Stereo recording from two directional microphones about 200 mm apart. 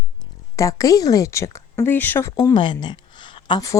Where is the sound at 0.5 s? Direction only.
15° left (ahead or behind).